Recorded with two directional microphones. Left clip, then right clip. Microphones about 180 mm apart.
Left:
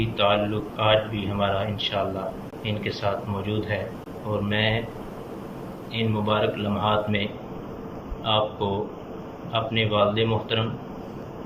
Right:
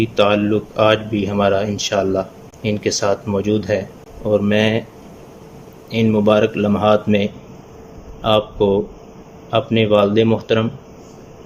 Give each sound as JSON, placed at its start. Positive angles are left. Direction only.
{"t": 0.0, "sound": "speech", "side_deg": -90}
{"t": 5.9, "sound": "speech", "side_deg": -90}